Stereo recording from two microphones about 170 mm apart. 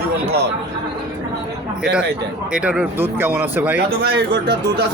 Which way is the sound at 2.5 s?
5° right (ahead or behind).